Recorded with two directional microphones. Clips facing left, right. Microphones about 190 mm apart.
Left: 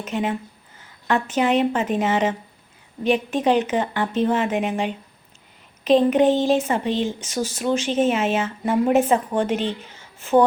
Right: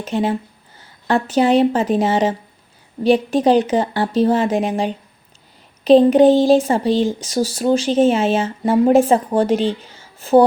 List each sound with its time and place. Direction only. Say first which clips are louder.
0.0 s speech: right 5 dB; 35° right (ahead or behind)